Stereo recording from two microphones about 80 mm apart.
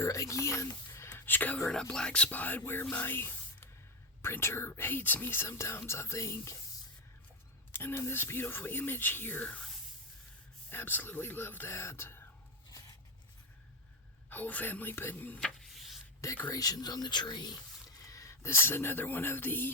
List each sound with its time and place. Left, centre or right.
0.0 s speech: left
1.1 s whispering: left
1.7 s speech: centre; by 2.8 s left
2.9 s spray: left
4.2 s speech: left
7.7 s speech: left
10.7 s speech: left
14.3 s speech: left
15.4 s rub: centre
16.2 s speech: left
16.5 s speech: left
18.0 s speech: left